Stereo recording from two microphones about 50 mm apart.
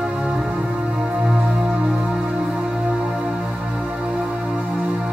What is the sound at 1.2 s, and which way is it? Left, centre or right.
Music, centre.